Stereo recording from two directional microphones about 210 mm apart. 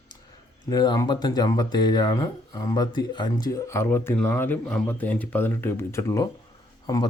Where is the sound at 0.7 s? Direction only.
20° left (ahead or behind).